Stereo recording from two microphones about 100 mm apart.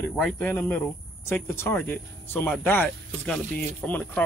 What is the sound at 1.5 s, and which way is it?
Speech, 20° left (ahead or behind).